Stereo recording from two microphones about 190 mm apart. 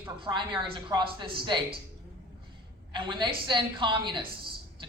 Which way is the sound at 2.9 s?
25° right (ahead or behind).